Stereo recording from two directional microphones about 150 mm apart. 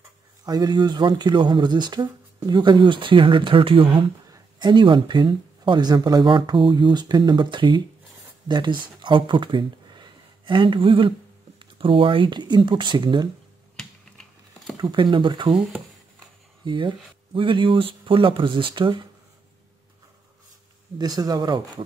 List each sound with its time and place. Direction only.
0.5 s speech: 25° right (ahead or behind)
14.8 s speech: 30° right (ahead or behind)
16.6 s speech: 35° right (ahead or behind)
21.0 s speech: 25° right (ahead or behind)